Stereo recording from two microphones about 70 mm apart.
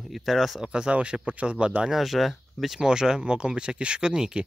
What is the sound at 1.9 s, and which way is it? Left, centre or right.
Speech, centre.